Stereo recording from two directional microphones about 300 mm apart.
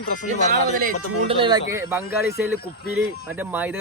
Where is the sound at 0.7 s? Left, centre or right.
Right.